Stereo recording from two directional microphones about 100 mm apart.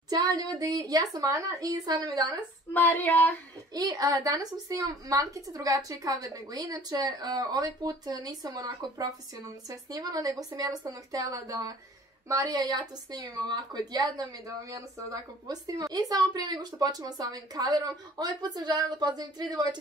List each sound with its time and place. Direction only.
0.1 s a woman's voice: 40° right (ahead or behind)
2.7 s child singing: 15° left (ahead or behind)
3.7 s a woman's voice: 40° right (ahead or behind)
15.4 s a woman's voice: 35° right (ahead or behind)